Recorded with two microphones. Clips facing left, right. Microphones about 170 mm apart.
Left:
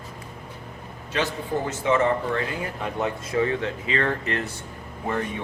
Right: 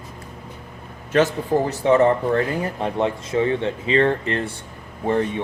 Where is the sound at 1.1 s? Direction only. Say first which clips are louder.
Right 8 dB; 35° right (ahead or behind).